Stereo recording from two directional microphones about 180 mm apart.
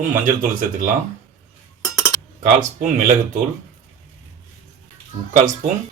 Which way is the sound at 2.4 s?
45° right (ahead or behind).